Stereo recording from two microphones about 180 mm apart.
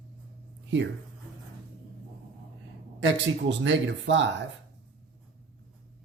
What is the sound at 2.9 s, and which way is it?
A man's voice, 90° right.